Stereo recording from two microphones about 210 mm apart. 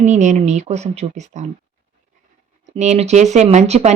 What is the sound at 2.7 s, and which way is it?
Speech, 30° right (ahead or behind).